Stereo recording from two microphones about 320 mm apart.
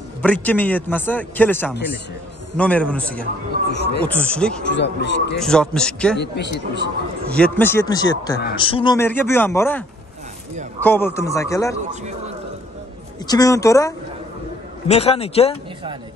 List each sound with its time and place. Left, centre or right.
0.2 s a man's voice: centre
3.6 s a sound: left
4.1 s a man's voice: centre
4.6 s speech: left
5.4 s a man's voice: centre
6.1 s speech: left
7.3 s speech: centre
13.3 s speech: centre